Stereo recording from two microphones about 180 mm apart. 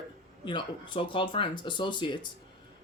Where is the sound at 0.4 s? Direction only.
25° left (ahead or behind).